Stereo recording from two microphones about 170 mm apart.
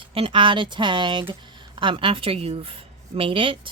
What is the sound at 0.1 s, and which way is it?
Speech, 30° right (ahead or behind).